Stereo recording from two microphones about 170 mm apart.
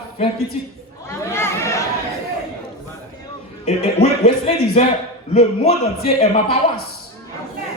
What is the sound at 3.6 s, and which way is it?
Speech, 40° left (ahead or behind).